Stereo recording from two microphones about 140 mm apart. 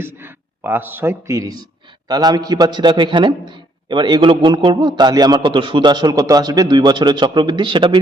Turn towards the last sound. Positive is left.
turn(degrees=-35)  # may be behind; listen again after turning